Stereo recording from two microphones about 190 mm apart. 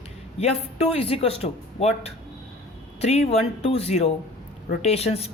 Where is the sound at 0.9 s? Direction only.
30° left (ahead or behind).